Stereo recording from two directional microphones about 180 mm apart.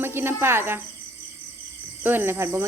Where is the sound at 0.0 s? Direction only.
10° right (ahead or behind).